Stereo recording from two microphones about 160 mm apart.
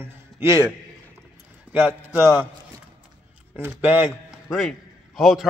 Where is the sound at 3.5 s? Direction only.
10° right (ahead or behind).